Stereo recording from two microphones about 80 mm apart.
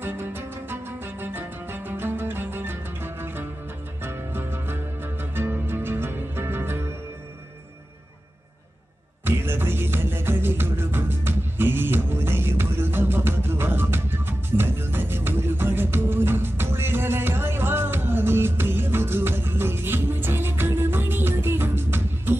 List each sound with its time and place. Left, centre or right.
0.0 s music: right
9.2 s music: right